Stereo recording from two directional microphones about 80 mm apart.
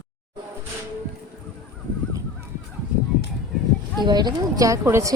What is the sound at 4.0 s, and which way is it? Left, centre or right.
Speech, right.